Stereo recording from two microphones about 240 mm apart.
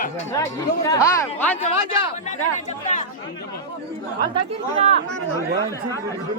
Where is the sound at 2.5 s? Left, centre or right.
Left.